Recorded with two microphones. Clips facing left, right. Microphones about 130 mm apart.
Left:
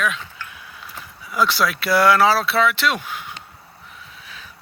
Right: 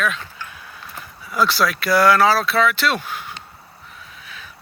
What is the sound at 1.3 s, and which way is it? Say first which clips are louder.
Speech: right 1 dB; 15° left (ahead or behind).